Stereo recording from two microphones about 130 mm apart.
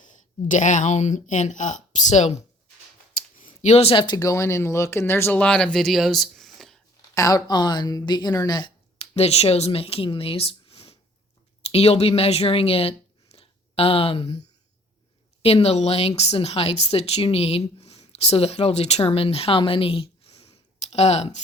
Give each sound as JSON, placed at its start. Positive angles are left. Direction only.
{"t": 0.0, "sound": "speech", "side_deg": 75}
{"t": 3.3, "sound": "speech", "side_deg": 75}
{"t": 7.1, "sound": "a woman's voice", "side_deg": 25}
{"t": 9.0, "sound": "speech", "side_deg": 50}
{"t": 13.3, "sound": "a sound", "side_deg": 45}
{"t": 15.4, "sound": "speech", "side_deg": 50}